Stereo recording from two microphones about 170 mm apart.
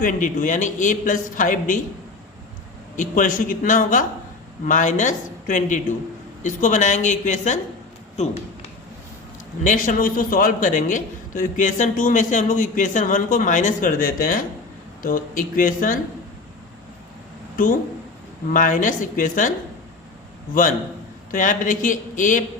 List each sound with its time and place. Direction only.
0.0 s a man's voice: 50° left (ahead or behind)
2.9 s a man's voice: 50° left (ahead or behind)
9.6 s a man's voice: 50° left (ahead or behind)
18.5 s a man's voice: 50° left (ahead or behind)
21.3 s a man's voice: 50° left (ahead or behind)